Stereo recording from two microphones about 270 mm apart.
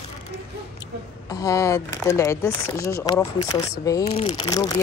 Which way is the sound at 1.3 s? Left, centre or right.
Centre.